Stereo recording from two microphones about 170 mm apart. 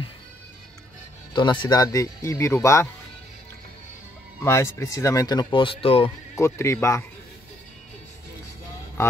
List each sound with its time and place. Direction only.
1.3 s speech: 25° left (ahead or behind)
4.4 s speech: 15° left (ahead or behind); by 6.1 s 35° left (ahead or behind)
6.3 s speech: 15° left (ahead or behind)